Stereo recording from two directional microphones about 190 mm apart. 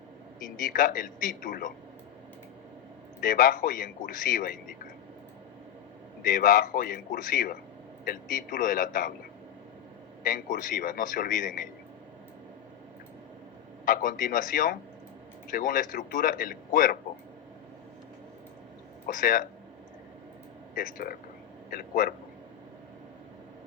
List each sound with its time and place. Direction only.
0.5 s speech: 45° left (ahead or behind)
3.2 s speech: 50° left (ahead or behind)
6.2 s speech: 45° left (ahead or behind)
10.2 s speech: 45° left (ahead or behind)
13.8 s speech: 45° left (ahead or behind)
19.0 s speech: 45° left (ahead or behind)
20.7 s speech: 50° left (ahead or behind)